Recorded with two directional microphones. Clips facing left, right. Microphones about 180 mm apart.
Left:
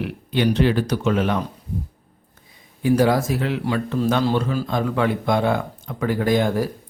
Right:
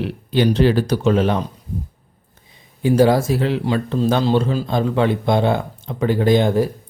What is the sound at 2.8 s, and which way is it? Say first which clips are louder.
Speech: right 3 dB; 25° right (ahead or behind).